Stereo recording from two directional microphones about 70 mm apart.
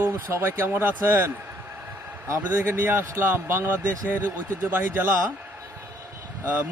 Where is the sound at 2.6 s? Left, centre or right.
Right.